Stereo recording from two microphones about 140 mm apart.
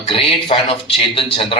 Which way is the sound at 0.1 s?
40° left (ahead or behind).